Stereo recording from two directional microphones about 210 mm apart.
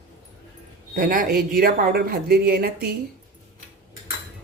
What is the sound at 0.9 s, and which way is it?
Speech, 40° right (ahead or behind).